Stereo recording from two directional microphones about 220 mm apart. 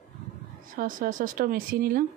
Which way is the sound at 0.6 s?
40° right (ahead or behind).